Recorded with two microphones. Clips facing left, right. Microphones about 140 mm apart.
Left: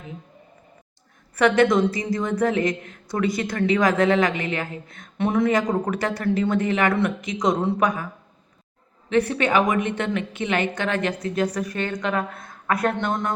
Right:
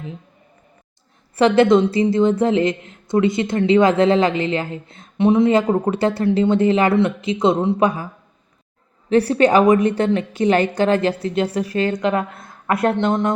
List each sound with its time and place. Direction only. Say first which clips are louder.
1.4 s a woman's voice: right 4 dB; 30° right (ahead or behind)